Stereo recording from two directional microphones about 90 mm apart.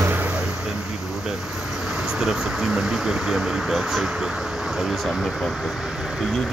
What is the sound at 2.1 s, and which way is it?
Speech, 5° right (ahead or behind).